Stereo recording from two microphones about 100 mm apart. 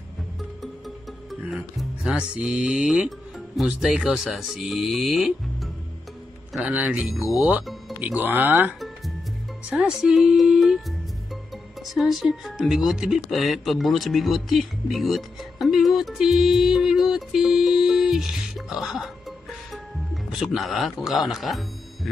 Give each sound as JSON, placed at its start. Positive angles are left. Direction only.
{"t": 0.4, "sound": "music", "side_deg": 0}
{"t": 1.5, "sound": "speech", "side_deg": -5}
{"t": 8.0, "sound": "speech", "side_deg": -15}
{"t": 8.7, "sound": "music", "side_deg": 0}
{"t": 9.7, "sound": "speech", "side_deg": -10}
{"t": 11.8, "sound": "speech", "side_deg": 0}
{"t": 20.4, "sound": "speech", "side_deg": 0}